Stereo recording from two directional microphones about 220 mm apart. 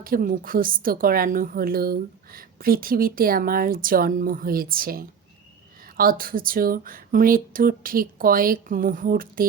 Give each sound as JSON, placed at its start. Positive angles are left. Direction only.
{"t": 0.0, "sound": "speech", "side_deg": -40}